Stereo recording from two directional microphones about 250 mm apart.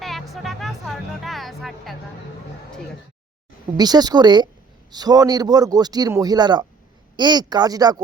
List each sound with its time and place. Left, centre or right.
0.0 s speech: centre
3.8 s a man's voice: centre